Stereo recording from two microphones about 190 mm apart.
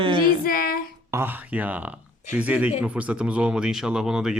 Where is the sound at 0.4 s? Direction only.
50° left (ahead or behind).